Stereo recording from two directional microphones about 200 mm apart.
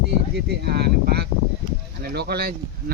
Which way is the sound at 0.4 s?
55° right (ahead or behind).